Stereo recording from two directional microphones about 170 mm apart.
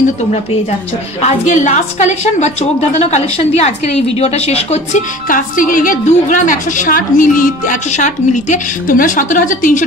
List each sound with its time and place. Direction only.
1.2 s a woman's voice: 45° left (ahead or behind)
5.3 s a woman's voice: 50° left (ahead or behind)